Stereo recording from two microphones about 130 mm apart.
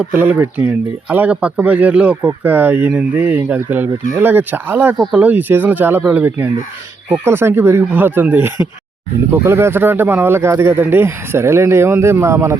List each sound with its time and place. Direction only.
0.0 s speech: 10° right (ahead or behind)